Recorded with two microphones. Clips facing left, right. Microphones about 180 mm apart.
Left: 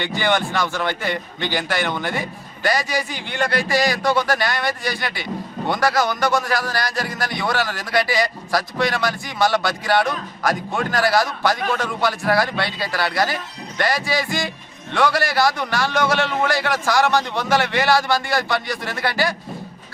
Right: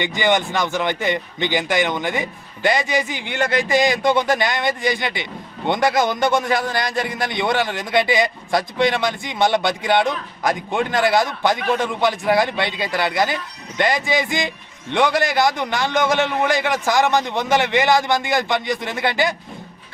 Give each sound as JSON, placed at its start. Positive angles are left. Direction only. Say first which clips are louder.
{"t": 0.0, "sound": "speech", "louder": "right 2 dB", "side_deg": -15}